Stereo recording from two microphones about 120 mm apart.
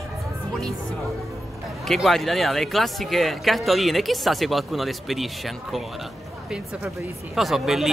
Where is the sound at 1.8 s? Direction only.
Centre (ahead or behind).